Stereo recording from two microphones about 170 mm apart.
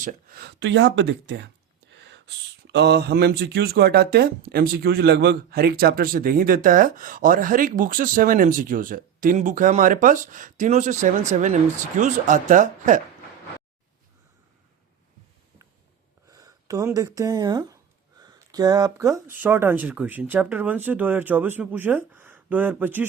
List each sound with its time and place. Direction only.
0.0 s speech: 55° right (ahead or behind)
16.3 s speech: 20° right (ahead or behind)